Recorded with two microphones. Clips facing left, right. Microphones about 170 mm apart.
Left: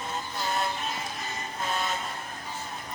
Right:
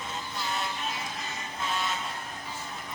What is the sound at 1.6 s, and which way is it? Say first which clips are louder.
Music: left 1 dB; 45° left (ahead or behind).